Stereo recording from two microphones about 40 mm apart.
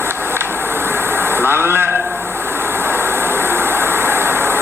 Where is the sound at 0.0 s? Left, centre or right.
Right.